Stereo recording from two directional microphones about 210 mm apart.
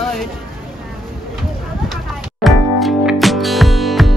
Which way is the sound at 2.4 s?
Centre (ahead or behind).